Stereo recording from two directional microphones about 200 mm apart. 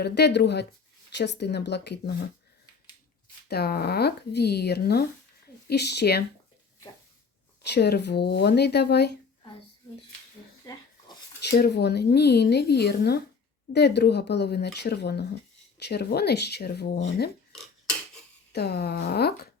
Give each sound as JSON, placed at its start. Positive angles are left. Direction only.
{"t": 0.0, "sound": "speech", "side_deg": 55}
{"t": 3.5, "sound": "speech", "side_deg": 55}
{"t": 7.7, "sound": "speech", "side_deg": 55}
{"t": 11.4, "sound": "speech", "side_deg": 55}
{"t": 17.5, "sound": "filing", "side_deg": 5}
{"t": 18.5, "sound": "speech", "side_deg": 55}